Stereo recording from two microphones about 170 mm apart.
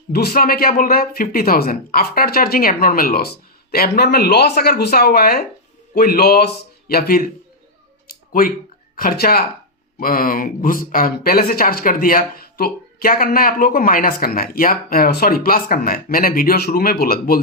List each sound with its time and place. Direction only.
0.1 s speech: 65° left (ahead or behind)
8.0 s a sound: 55° left (ahead or behind)
9.0 s speech: 60° left (ahead or behind)